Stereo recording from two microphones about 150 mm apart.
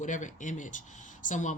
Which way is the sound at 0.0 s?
55° left (ahead or behind).